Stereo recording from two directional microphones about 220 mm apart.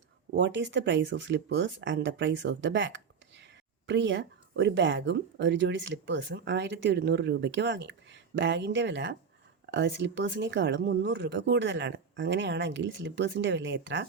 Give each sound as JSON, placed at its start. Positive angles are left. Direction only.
{"t": 0.3, "sound": "speech", "side_deg": -55}